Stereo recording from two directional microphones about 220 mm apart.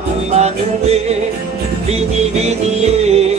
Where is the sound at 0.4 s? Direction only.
30° right (ahead or behind).